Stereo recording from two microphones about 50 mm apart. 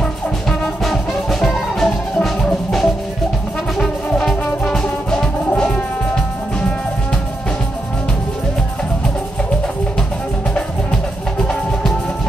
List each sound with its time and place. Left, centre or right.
0.5 s music: centre
5.5 s music: left